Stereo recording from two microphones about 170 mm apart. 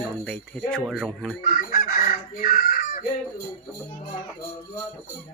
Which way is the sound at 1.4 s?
55° left (ahead or behind).